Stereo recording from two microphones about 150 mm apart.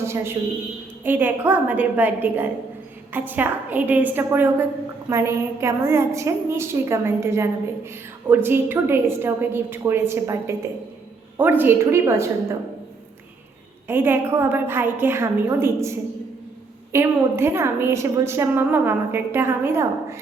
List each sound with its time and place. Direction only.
0.0 s a woman's voice: 15° right (ahead or behind)
13.8 s a woman's voice: 15° right (ahead or behind)